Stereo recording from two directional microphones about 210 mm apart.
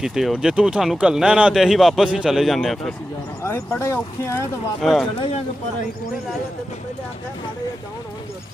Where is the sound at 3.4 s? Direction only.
10° left (ahead or behind).